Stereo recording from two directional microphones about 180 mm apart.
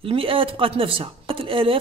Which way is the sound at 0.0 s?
30° right (ahead or behind).